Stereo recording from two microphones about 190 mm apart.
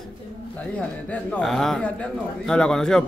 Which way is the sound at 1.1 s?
5° left (ahead or behind).